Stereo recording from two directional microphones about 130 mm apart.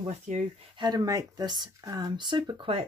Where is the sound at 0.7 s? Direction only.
30° right (ahead or behind).